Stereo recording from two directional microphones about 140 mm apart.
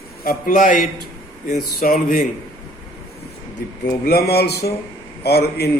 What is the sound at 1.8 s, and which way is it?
Speech, 90° left.